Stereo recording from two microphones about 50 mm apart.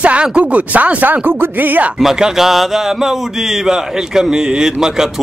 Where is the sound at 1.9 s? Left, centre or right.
Centre.